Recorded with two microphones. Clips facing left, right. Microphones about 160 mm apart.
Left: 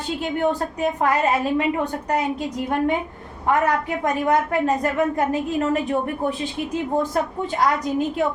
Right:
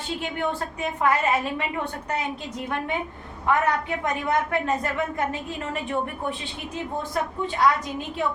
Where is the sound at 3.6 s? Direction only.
35° left (ahead or behind).